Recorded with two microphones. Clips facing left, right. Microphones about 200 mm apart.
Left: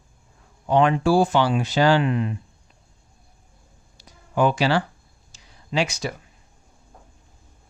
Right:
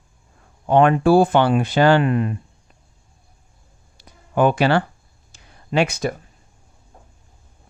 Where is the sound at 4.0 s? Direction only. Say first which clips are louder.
Right 3 dB; 55° right (ahead or behind).